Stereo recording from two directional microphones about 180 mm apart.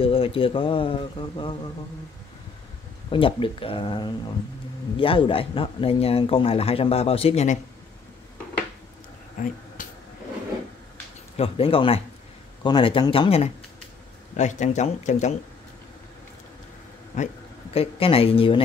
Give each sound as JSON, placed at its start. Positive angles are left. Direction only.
{"t": 0.0, "sound": "speech", "side_deg": 30}
{"t": 3.1, "sound": "speech", "side_deg": 30}
{"t": 9.4, "sound": "speech", "side_deg": 45}
{"t": 9.8, "sound": "a sound", "side_deg": 50}
{"t": 11.3, "sound": "speech", "side_deg": 30}
{"t": 17.1, "sound": "speech", "side_deg": 40}